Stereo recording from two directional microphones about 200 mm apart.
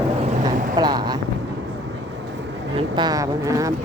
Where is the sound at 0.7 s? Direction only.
20° right (ahead or behind).